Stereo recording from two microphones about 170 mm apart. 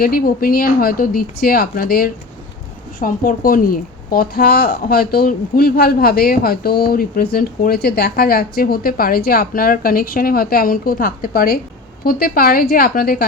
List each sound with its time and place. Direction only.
0.0 s speech: 60° left (ahead or behind)